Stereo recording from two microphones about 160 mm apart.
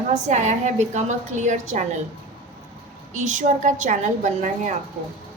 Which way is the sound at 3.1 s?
50° right (ahead or behind).